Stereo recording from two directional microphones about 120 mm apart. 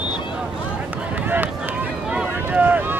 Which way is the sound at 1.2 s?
15° right (ahead or behind).